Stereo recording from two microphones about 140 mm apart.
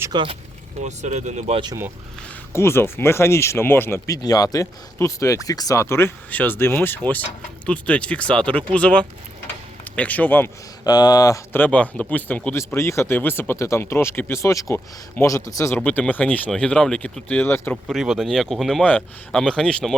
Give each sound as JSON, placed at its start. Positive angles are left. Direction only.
{"t": 0.1, "sound": "speech", "side_deg": -40}
{"t": 0.9, "sound": "speech", "side_deg": -55}
{"t": 2.5, "sound": "speech", "side_deg": 20}
{"t": 10.8, "sound": "speech", "side_deg": 30}
{"t": 15.8, "sound": "speech", "side_deg": 10}
{"t": 17.8, "sound": "speech", "side_deg": 0}